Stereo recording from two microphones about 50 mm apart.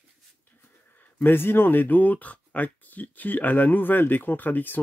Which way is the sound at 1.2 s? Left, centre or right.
Left.